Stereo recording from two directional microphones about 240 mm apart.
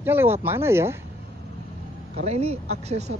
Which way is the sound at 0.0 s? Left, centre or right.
Centre.